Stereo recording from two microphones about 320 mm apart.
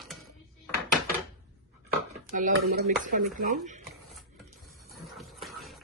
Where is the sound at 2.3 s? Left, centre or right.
Right.